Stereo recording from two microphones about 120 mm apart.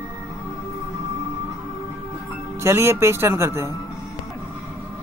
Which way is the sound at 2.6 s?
20° right (ahead or behind).